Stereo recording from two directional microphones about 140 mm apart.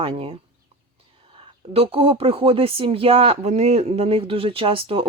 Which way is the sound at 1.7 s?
45° right (ahead or behind).